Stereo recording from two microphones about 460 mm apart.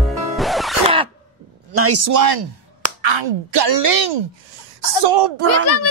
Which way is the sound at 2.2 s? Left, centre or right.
Right.